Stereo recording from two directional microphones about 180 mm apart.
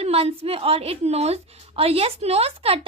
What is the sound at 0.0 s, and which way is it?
A woman's voice, 35° right (ahead or behind).